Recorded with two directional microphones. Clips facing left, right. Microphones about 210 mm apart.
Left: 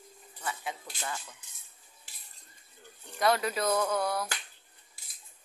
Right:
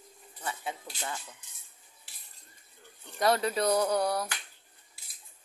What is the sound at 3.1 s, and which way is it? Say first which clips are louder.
Speech: right 1 dB; 35° right (ahead or behind).